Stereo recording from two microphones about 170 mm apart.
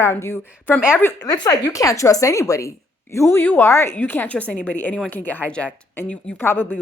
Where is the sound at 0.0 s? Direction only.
15° left (ahead or behind).